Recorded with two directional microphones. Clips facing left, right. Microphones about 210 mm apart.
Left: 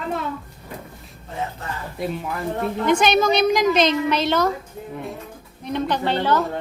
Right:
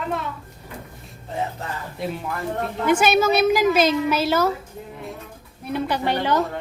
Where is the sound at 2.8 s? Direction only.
5° right (ahead or behind).